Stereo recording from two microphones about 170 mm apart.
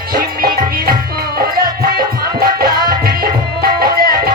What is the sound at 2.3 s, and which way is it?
Music, 60° right (ahead or behind).